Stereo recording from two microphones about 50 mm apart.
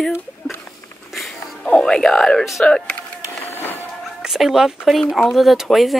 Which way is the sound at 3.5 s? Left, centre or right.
Left.